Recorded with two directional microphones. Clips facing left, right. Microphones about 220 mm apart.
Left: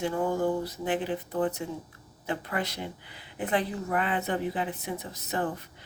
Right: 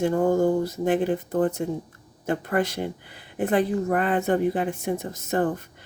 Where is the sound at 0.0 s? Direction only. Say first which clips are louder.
Right 7 dB; 45° right (ahead or behind).